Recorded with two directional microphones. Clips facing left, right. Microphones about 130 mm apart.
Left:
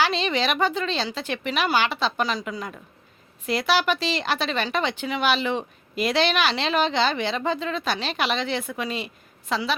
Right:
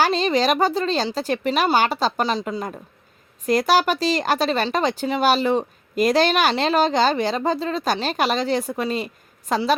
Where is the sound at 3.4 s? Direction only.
45° right (ahead or behind).